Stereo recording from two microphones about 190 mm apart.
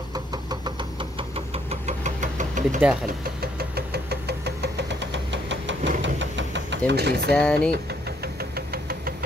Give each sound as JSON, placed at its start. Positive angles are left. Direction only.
{"t": 0.1, "sound": "knock", "side_deg": -20}
{"t": 3.1, "sound": "engine", "side_deg": -55}
{"t": 7.3, "sound": "speech", "side_deg": 5}
{"t": 8.4, "sound": "a sound", "side_deg": -55}